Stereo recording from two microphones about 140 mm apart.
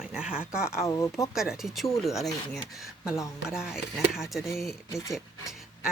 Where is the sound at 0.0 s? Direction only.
5° right (ahead or behind).